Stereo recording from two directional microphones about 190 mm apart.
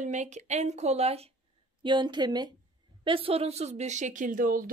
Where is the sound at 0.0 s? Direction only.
40° right (ahead or behind).